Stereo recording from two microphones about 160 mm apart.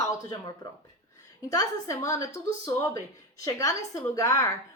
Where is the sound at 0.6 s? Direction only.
25° left (ahead or behind).